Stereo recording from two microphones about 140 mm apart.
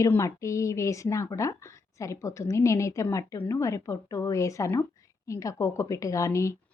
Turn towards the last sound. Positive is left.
turn(degrees=20)  # may be behind; listen again after turning